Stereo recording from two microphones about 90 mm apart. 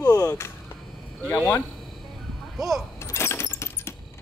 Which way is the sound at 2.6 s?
Centre (ahead or behind).